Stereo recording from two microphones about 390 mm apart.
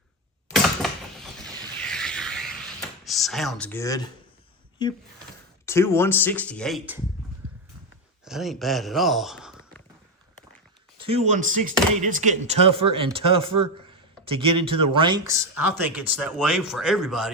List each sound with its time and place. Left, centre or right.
0.5 s a sound: centre
3.0 s speech: centre
8.2 s speech: centre
10.9 s speech: centre
13.9 s a sound: centre
14.9 s speech: centre